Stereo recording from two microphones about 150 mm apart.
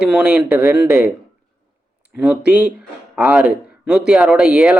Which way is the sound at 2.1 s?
5° right (ahead or behind).